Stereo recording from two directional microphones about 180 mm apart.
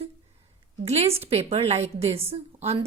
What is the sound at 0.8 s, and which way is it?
A woman's voice, 35° right (ahead or behind).